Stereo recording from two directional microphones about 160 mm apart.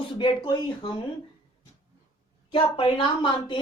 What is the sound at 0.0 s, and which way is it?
Speech, 30° left (ahead or behind).